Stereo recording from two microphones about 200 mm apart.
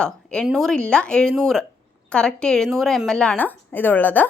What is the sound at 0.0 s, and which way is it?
A woman's voice, 5° left (ahead or behind).